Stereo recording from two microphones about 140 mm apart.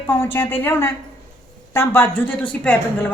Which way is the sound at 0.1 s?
15° left (ahead or behind).